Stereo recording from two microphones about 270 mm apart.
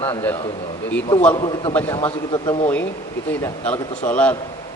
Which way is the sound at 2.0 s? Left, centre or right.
Centre.